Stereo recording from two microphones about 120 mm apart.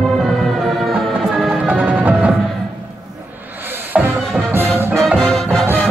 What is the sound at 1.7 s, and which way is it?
Music, 15° right (ahead or behind).